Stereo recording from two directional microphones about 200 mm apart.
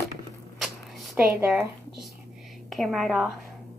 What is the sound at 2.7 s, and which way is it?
Speech, centre (ahead or behind).